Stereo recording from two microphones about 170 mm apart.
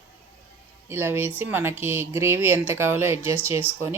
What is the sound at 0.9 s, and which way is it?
Speech, 15° right (ahead or behind).